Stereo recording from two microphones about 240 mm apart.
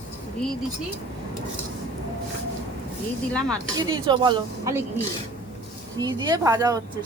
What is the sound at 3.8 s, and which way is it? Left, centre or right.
Speech, centre.